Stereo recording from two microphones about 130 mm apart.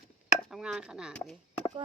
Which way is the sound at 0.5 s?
5° right (ahead or behind).